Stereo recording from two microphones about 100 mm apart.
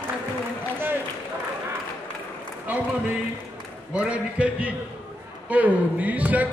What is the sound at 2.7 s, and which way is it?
Run, 15° right (ahead or behind).